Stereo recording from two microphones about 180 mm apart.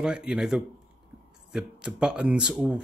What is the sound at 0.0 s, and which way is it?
Speech, 5° right (ahead or behind).